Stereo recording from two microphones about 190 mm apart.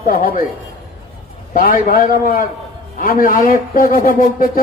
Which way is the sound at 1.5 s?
50° left (ahead or behind).